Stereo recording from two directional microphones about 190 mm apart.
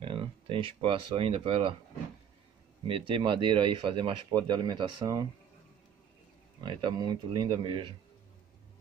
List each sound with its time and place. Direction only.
0.0 s speech: 25° right (ahead or behind)
2.9 s speech: 25° right (ahead or behind)
6.6 s speech: 25° right (ahead or behind)